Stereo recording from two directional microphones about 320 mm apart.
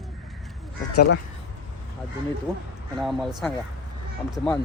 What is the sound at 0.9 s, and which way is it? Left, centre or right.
Speech, left.